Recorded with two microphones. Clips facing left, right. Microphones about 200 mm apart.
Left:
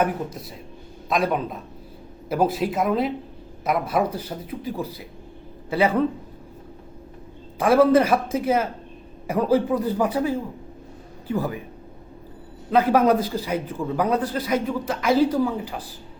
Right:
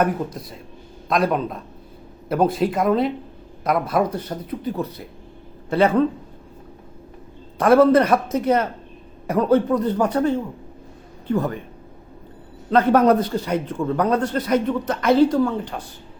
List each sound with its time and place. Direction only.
1.1 s a man's voice: centre (ahead or behind)
7.6 s a man's voice: 5° left (ahead or behind)
12.7 s a man's voice: centre (ahead or behind)